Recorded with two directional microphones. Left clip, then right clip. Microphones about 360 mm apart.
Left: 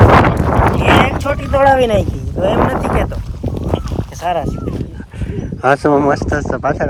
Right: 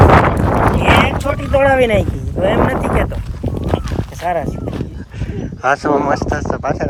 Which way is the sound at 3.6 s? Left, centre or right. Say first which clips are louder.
Right 1 dB; centre.